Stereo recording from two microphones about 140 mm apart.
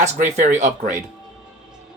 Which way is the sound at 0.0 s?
65° right (ahead or behind).